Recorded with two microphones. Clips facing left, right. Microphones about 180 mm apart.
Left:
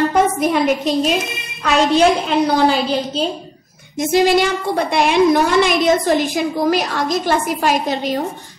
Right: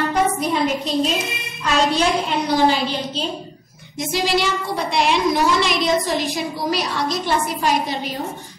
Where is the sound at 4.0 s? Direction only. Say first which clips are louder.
Left 7 dB; 50° left (ahead or behind).